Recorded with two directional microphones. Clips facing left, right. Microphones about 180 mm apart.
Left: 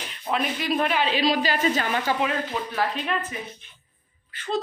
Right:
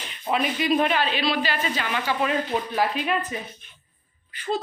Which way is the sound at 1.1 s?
40° left (ahead or behind).